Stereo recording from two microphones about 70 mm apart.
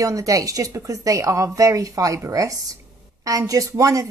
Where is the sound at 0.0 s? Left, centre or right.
Right.